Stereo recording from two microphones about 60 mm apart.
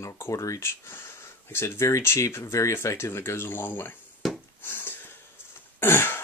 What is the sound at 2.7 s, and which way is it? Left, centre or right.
Speech, left.